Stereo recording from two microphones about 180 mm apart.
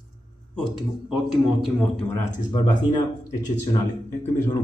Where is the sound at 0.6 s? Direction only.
Centre (ahead or behind).